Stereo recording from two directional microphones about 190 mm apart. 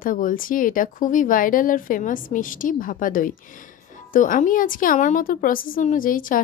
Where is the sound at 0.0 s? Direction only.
45° left (ahead or behind).